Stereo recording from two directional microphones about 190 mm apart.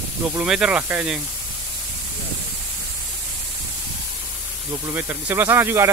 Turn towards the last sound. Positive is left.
turn(degrees=-10)  # may be behind; listen again after turning